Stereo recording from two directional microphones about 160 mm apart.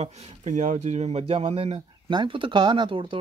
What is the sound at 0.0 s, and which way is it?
Speech, 40° right (ahead or behind).